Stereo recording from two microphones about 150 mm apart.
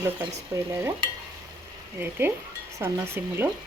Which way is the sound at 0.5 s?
20° right (ahead or behind).